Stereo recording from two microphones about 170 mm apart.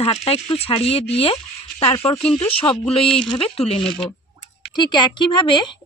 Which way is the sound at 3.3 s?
35° left (ahead or behind).